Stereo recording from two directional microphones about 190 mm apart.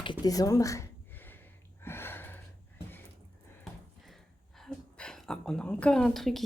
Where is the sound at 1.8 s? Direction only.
10° left (ahead or behind).